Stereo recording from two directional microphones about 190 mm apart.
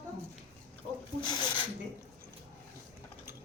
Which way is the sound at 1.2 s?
25° left (ahead or behind).